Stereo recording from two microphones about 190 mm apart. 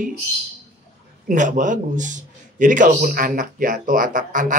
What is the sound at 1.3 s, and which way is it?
A man's voice, 40° right (ahead or behind).